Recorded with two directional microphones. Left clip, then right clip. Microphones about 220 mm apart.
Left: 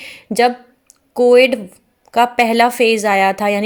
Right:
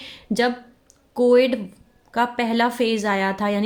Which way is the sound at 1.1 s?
30° left (ahead or behind).